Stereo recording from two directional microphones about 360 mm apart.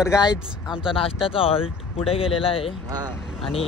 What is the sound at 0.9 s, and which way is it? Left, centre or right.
Speech, centre.